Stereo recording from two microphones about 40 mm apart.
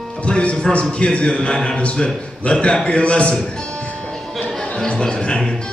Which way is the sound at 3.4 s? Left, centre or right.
Left.